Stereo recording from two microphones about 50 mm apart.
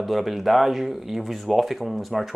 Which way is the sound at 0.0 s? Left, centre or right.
Centre.